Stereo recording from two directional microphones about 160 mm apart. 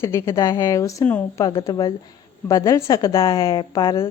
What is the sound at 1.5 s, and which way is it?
A woman's voice, 25° left (ahead or behind).